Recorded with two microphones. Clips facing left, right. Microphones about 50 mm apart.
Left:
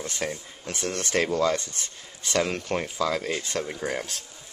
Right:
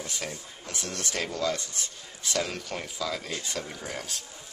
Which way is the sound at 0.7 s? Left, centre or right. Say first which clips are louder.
Left 6 dB; centre.